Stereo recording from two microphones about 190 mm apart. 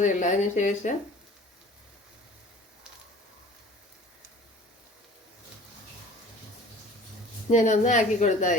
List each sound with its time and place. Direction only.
0.0 s speech: 40° left (ahead or behind)
7.5 s speech: 40° left (ahead or behind)